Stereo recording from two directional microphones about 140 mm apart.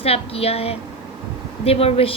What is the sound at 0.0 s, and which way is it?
Speech, 45° left (ahead or behind).